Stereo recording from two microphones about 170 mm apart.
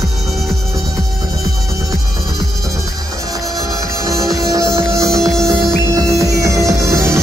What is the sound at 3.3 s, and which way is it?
Music, 20° right (ahead or behind).